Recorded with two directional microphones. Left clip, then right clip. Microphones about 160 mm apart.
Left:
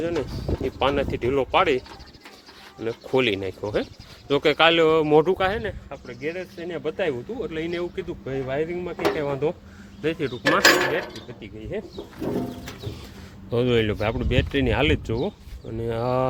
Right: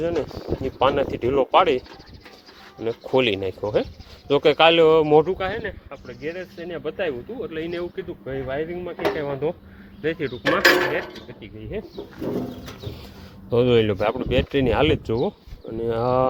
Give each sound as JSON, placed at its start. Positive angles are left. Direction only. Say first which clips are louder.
{"t": 0.0, "sound": "speech", "louder": "right 2 dB", "side_deg": -10}
{"t": 2.8, "sound": "speech", "louder": "right 2 dB", "side_deg": -15}
{"t": 5.2, "sound": "speech", "louder": "left 3 dB", "side_deg": 60}
{"t": 5.6, "sound": "speech", "louder": "even", "side_deg": 25}
{"t": 13.5, "sound": "speech", "louder": "right 4 dB", "side_deg": -20}